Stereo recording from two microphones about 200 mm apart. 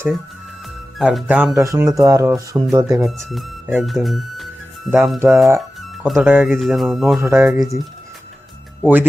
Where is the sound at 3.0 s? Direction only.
Centre (ahead or behind).